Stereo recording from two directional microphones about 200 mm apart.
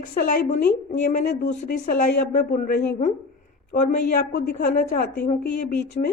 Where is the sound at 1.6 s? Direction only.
40° left (ahead or behind).